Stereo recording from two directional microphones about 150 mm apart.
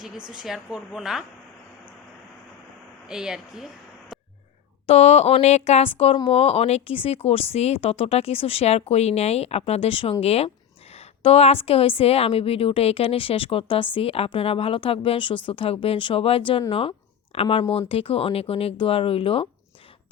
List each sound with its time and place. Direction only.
0.3 s a woman's voice: 5° right (ahead or behind)
3.1 s a woman's voice: 5° right (ahead or behind)
4.9 s a woman's voice: 45° left (ahead or behind)